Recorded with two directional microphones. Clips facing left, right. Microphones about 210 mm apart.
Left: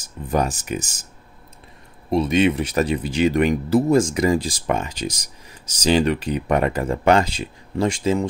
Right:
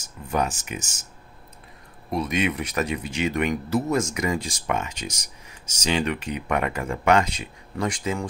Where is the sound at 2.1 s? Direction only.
30° left (ahead or behind).